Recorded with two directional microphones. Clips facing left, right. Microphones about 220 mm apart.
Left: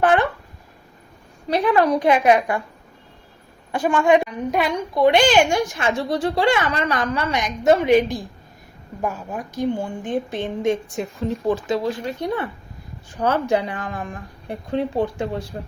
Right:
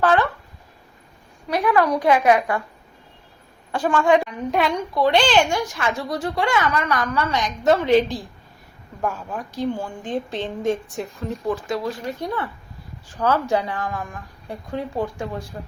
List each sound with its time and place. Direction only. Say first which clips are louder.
0.0 s a woman's voice: left 1 dB; 15° left (ahead or behind)
1.5 s a child's voice: left 2 dB; 30° left (ahead or behind)
3.7 s a woman's voice: left 1 dB; 15° left (ahead or behind)
10.0 s a woman's voice: left 2 dB; 10° left (ahead or behind); by 15.4 s 30° left (ahead or behind)